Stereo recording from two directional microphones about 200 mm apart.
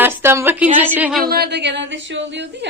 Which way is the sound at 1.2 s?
50° right (ahead or behind).